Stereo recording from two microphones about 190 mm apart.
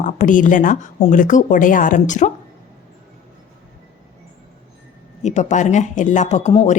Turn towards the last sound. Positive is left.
turn(degrees=35)  # may be behind; listen again after turning